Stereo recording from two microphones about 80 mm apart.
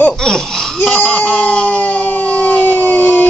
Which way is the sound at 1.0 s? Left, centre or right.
Centre.